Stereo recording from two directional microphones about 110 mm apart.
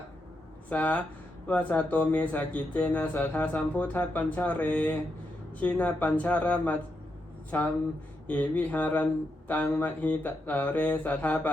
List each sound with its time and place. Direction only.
0.7 s speech: 15° left (ahead or behind)